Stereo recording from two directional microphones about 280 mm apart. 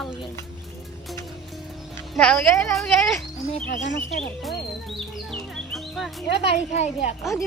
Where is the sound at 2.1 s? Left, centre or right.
Centre.